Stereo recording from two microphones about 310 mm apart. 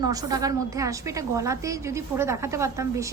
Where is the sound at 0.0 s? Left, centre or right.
Centre.